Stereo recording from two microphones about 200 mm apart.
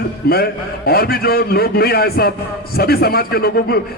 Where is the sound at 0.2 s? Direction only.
50° left (ahead or behind).